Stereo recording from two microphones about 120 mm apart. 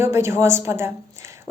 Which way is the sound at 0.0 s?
20° right (ahead or behind).